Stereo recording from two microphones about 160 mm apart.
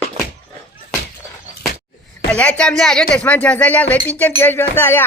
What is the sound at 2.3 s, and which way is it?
Speech, 10° left (ahead or behind).